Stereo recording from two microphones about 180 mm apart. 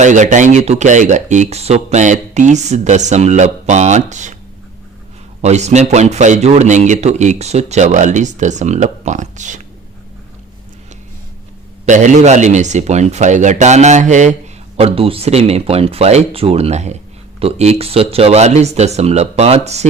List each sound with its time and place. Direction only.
0.0 s speech: 45° right (ahead or behind)
5.4 s speech: 40° right (ahead or behind)
11.9 s speech: 40° right (ahead or behind)